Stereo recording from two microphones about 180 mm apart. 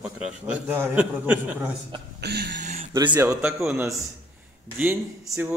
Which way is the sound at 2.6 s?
40° right (ahead or behind).